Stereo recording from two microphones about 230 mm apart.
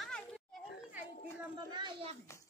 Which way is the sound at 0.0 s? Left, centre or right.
Centre.